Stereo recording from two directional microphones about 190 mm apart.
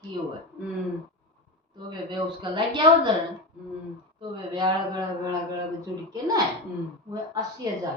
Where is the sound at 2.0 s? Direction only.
25° right (ahead or behind).